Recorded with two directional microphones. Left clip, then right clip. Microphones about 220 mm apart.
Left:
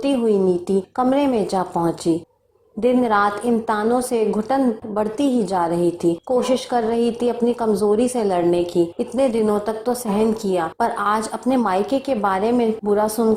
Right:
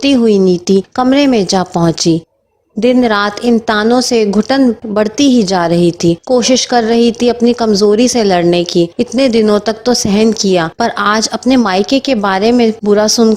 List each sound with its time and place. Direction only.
0.0 s a woman's voice: 45° right (ahead or behind)